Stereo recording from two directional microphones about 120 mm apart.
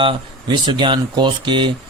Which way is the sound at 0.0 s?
40° right (ahead or behind).